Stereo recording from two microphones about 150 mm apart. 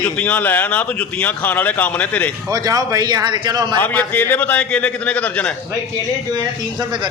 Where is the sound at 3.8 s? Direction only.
10° left (ahead or behind).